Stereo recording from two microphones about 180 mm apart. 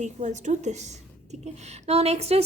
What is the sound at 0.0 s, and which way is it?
A woman's voice, 40° right (ahead or behind).